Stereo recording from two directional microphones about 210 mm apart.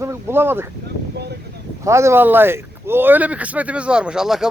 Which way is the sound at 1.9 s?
15° right (ahead or behind).